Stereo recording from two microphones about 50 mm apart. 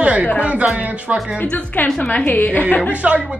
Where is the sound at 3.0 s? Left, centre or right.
Right.